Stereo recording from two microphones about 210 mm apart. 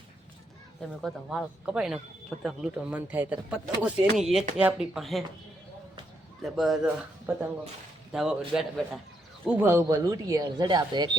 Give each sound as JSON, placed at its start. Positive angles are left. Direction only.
{"t": 0.8, "sound": "speech", "side_deg": 0}
{"t": 6.4, "sound": "speech", "side_deg": 0}
{"t": 8.1, "sound": "speech", "side_deg": 0}